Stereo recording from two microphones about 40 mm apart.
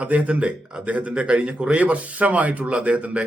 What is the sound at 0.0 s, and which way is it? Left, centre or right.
Speech, right.